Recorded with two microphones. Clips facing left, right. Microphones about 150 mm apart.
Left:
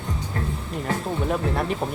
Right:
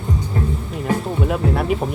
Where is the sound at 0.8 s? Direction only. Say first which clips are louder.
Right 5 dB; 5° right (ahead or behind).